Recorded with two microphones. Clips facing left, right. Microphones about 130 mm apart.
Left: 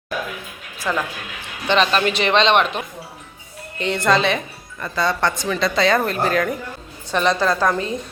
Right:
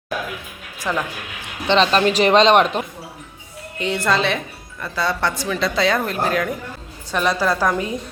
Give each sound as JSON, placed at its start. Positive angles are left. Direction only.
{"t": 0.8, "sound": "a woman's voice", "side_deg": -15}
{"t": 1.6, "sound": "a man's voice", "side_deg": -25}
{"t": 2.0, "sound": "speech", "side_deg": -40}
{"t": 3.8, "sound": "a woman's voice", "side_deg": -5}